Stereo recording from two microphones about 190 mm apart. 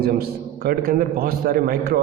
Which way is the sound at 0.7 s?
50° right (ahead or behind).